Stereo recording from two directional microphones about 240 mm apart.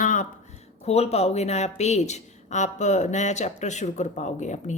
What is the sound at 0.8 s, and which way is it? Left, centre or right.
Speech, left.